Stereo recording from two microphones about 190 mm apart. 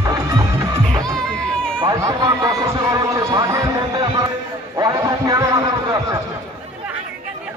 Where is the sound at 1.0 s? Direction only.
5° left (ahead or behind).